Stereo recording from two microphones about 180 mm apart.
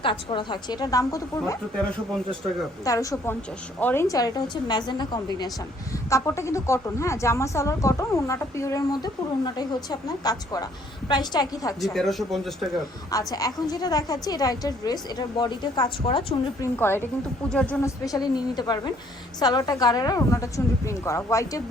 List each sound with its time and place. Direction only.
0.0 s a woman's voice: 30° left (ahead or behind)
2.8 s a woman's voice: 20° left (ahead or behind)
11.8 s speech: centre (ahead or behind)
13.1 s a woman's voice: 20° left (ahead or behind)
16.7 s a woman's voice: 10° left (ahead or behind)
17.8 s a woman's voice: 20° left (ahead or behind)